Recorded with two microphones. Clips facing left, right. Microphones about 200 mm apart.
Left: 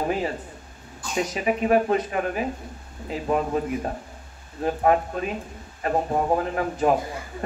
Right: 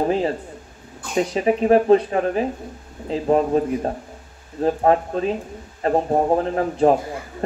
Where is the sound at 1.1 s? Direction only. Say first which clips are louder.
Right 5 dB; 30° right (ahead or behind).